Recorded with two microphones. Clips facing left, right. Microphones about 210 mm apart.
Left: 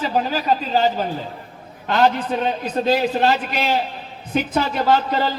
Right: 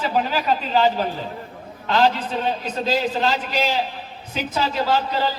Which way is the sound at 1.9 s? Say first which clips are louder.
Left 2 dB; 55° left (ahead or behind).